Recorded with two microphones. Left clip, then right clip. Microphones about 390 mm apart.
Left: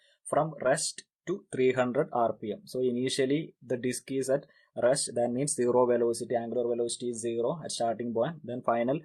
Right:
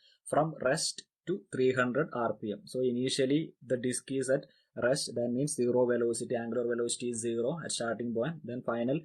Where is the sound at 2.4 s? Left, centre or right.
Centre.